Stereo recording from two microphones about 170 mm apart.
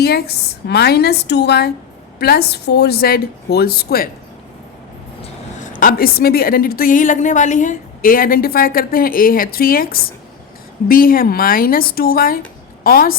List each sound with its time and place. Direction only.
0.0 s a woman's voice: 70° left (ahead or behind)
5.2 s a woman's voice: 50° left (ahead or behind)